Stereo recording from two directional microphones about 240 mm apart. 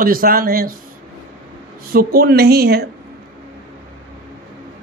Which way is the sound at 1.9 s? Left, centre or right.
Right.